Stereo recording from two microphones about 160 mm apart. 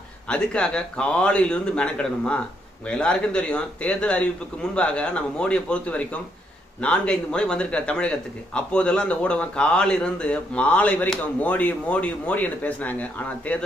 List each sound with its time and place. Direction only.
0.3 s a man's voice: 5° left (ahead or behind)